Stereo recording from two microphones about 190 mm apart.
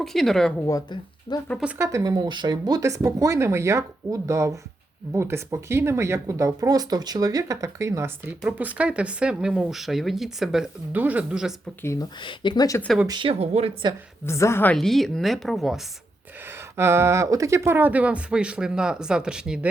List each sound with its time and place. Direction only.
0.0 s speech: centre (ahead or behind)
0.6 s speech: 20° left (ahead or behind)
1.6 s speech: 15° right (ahead or behind)
11.8 s speech: 15° left (ahead or behind)
12.2 s speech: 25° left (ahead or behind)
13.1 s speech: 25° right (ahead or behind)
14.3 s speech: 15° left (ahead or behind)
16.7 s speech: 15° right (ahead or behind)